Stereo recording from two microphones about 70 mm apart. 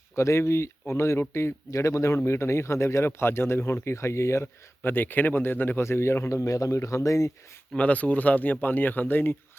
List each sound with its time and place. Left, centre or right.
0.2 s a man's voice: left
4.8 s speech: left
5.8 s speech: left
7.8 s speech: centre